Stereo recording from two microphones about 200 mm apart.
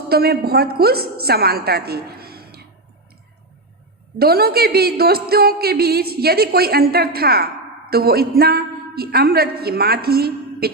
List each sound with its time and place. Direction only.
0.1 s a woman's voice: 50° right (ahead or behind)
4.2 s speech: 50° right (ahead or behind)